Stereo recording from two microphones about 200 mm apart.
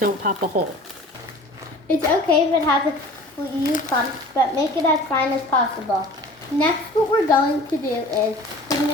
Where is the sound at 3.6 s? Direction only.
40° left (ahead or behind).